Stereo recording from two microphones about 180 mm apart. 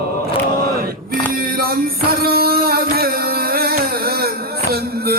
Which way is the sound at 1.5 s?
55° right (ahead or behind).